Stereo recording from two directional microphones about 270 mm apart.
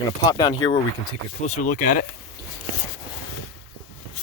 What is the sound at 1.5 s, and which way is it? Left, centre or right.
Speech, left.